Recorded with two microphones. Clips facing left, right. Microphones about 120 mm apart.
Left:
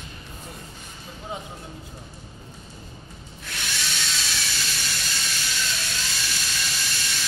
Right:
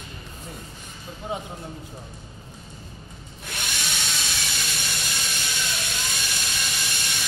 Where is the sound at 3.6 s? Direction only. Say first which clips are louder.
Even; 15° right (ahead or behind).